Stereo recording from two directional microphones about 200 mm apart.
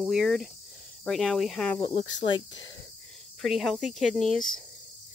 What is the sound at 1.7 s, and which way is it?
Speech, 25° left (ahead or behind).